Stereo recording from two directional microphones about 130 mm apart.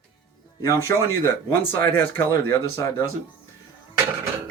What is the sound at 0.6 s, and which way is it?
Speech, 20° left (ahead or behind).